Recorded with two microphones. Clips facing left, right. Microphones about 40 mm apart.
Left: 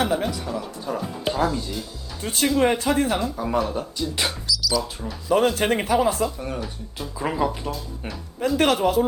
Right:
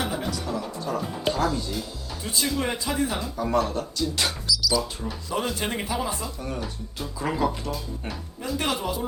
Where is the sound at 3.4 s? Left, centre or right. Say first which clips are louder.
Even; centre.